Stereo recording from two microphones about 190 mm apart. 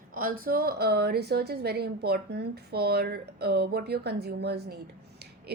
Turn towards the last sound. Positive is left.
turn(degrees=-55)  # may be behind; listen again after turning